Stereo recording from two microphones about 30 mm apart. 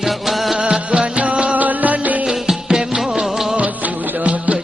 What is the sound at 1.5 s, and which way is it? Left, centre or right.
Music, right.